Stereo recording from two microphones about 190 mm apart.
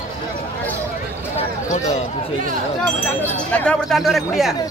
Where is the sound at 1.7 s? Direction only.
35° left (ahead or behind).